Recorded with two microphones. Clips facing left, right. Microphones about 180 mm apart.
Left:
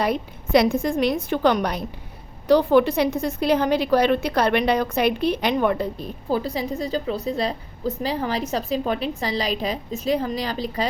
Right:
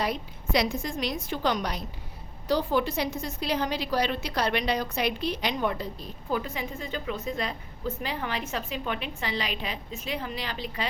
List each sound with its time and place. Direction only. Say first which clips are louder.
0.0 s a woman's voice: left 7 dB; 55° left (ahead or behind)
6.2 s a woman's voice: left 6 dB; 35° left (ahead or behind)